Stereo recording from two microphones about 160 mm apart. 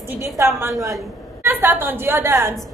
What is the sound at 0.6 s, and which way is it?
A woman's voice, 20° right (ahead or behind).